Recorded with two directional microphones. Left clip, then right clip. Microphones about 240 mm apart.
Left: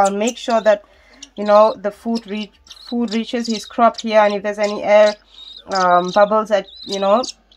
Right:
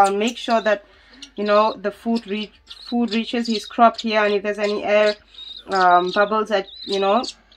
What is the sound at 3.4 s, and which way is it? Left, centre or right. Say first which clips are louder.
Speech: even; centre.